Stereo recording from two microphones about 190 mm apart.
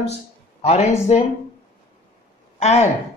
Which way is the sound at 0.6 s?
35° left (ahead or behind).